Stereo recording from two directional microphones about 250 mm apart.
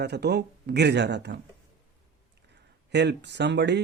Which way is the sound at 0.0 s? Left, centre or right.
Right.